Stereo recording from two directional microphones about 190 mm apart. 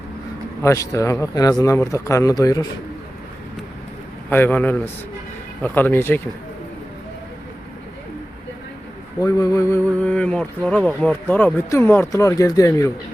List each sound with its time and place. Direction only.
0.6 s speech: 15° left (ahead or behind)
4.3 s speech: 10° left (ahead or behind)
9.2 s speech: 15° left (ahead or behind)